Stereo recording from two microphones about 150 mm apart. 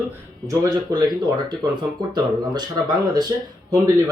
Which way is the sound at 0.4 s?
25° right (ahead or behind).